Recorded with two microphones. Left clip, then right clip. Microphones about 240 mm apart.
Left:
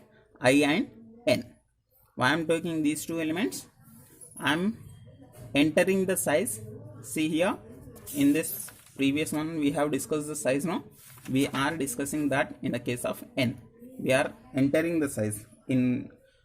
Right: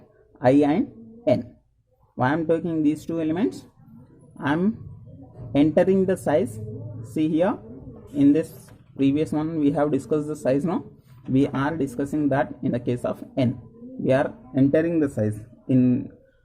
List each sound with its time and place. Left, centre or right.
0.3 s speech: left